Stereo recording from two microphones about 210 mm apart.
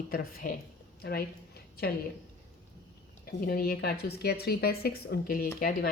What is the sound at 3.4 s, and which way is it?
A woman's voice, 45° left (ahead or behind).